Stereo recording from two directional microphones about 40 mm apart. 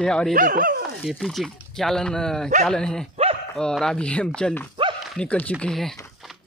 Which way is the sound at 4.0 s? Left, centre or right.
Left.